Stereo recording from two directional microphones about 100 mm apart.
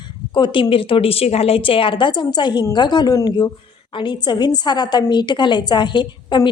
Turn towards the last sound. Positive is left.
turn(degrees=50)  # may be behind; listen again after turning